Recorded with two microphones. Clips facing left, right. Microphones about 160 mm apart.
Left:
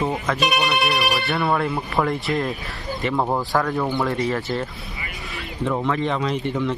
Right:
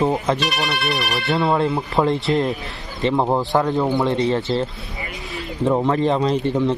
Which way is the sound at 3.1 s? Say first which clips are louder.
Right 3 dB; 15° right (ahead or behind).